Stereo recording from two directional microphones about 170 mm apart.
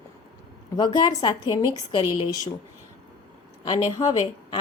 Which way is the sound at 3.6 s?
25° left (ahead or behind).